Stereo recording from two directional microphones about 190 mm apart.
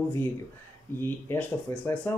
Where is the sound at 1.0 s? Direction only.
10° left (ahead or behind).